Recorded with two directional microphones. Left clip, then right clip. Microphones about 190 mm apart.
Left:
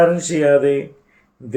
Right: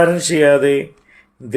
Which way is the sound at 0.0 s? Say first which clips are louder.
Right 2 dB; 50° right (ahead or behind).